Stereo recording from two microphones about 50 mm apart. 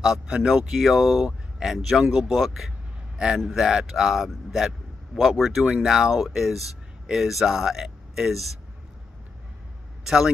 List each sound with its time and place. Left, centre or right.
0.0 s speech: centre
10.0 s a man's voice: centre